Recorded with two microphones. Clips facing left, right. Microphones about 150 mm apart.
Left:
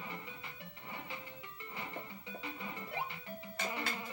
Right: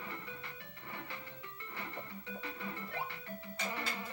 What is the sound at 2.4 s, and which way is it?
Music, 15° left (ahead or behind).